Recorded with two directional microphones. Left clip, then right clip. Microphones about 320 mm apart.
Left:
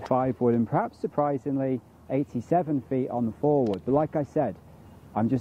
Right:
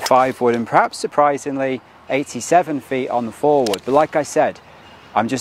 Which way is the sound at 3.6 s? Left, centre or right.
Centre.